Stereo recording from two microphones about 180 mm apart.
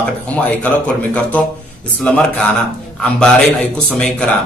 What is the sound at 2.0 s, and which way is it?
A man's voice, 5° left (ahead or behind).